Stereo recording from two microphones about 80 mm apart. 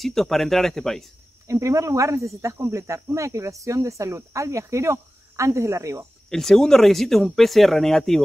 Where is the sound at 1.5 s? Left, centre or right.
Right.